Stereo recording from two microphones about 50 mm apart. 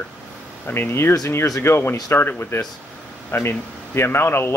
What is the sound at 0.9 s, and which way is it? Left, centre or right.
Speech, left.